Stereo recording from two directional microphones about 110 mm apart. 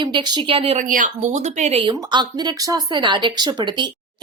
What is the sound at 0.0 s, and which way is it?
Speech, 40° right (ahead or behind).